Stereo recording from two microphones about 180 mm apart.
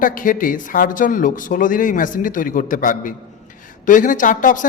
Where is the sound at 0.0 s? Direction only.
50° left (ahead or behind).